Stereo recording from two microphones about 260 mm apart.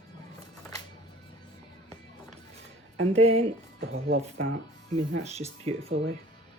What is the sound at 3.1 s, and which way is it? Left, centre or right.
Speech, right.